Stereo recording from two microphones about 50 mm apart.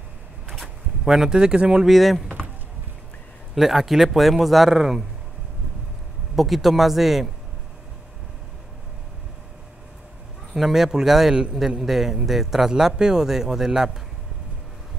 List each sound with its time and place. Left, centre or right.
0.5 s a sound: centre
1.1 s a man's voice: centre
1.9 s speech: centre
3.5 s speech: centre
6.3 s speech: centre
10.5 s a man's voice: centre